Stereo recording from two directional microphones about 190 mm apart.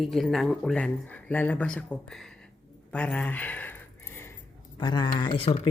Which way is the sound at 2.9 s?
5° left (ahead or behind).